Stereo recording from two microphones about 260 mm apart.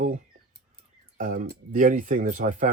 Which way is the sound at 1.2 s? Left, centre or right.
Right.